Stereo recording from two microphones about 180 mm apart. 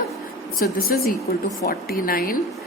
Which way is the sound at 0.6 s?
55° left (ahead or behind).